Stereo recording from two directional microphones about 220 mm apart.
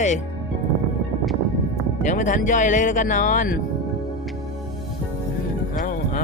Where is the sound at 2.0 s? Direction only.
35° left (ahead or behind).